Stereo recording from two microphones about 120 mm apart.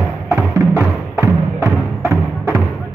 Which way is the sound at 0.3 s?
25° right (ahead or behind).